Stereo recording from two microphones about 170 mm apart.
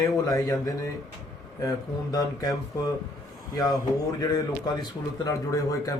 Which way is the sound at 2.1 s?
25° left (ahead or behind).